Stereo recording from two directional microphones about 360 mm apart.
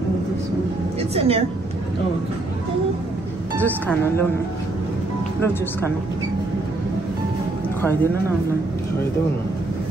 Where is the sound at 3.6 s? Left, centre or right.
Centre.